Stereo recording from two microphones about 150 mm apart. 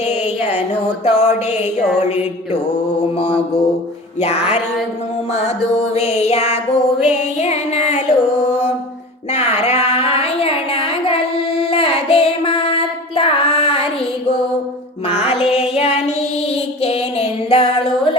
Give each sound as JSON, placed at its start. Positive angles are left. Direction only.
{"t": 1.0, "sound": "music", "side_deg": 50}
{"t": 9.3, "sound": "a sound", "side_deg": 45}
{"t": 15.0, "sound": "music", "side_deg": 40}